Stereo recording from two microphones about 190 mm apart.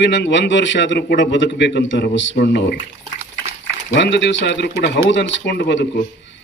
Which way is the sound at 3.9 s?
65° left (ahead or behind).